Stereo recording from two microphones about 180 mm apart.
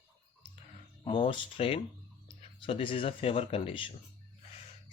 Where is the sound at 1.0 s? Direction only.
25° left (ahead or behind).